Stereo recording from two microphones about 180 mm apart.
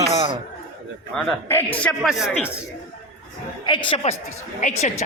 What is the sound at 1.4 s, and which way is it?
Speech, 10° left (ahead or behind).